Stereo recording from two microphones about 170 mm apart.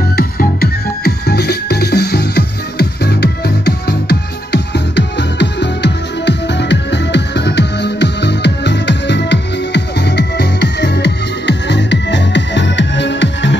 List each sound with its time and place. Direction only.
0.1 s music: 60° left (ahead or behind); by 13.6 s 90° left